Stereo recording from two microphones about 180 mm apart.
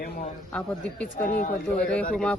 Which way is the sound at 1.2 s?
45° left (ahead or behind).